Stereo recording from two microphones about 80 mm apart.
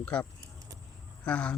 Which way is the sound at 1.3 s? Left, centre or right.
Centre.